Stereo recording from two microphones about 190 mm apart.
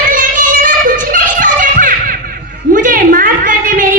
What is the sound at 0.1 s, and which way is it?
Music, 45° right (ahead or behind).